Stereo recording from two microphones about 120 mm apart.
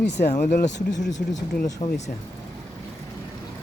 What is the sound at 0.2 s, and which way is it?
Speech, 80° left.